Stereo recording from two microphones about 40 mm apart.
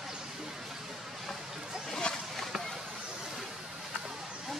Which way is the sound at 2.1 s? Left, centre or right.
Left.